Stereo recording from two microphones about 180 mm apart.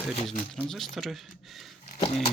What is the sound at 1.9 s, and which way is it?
Dog, 30° left (ahead or behind).